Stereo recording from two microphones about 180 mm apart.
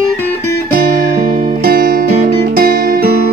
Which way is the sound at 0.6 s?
50° right (ahead or behind).